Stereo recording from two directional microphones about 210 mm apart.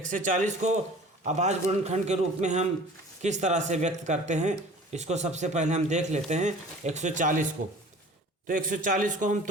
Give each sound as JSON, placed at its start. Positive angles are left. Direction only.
{"t": 0.1, "sound": "speech", "side_deg": -35}
{"t": 8.4, "sound": "speech", "side_deg": -40}